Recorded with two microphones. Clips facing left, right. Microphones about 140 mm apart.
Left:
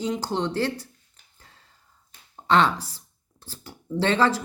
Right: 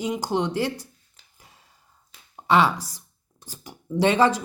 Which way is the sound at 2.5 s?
10° right (ahead or behind).